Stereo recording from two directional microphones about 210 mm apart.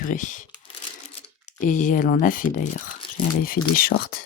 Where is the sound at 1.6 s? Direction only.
40° left (ahead or behind).